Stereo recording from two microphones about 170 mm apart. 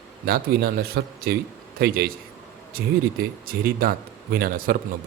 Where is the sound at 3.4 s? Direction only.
60° right (ahead or behind).